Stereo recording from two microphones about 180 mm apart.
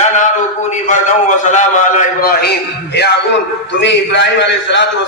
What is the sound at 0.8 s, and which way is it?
A man's voice, 40° left (ahead or behind).